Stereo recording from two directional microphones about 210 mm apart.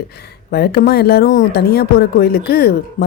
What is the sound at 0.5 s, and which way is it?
Speech, 50° left (ahead or behind).